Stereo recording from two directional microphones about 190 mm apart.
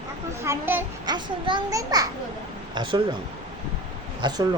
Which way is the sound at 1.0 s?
25° right (ahead or behind).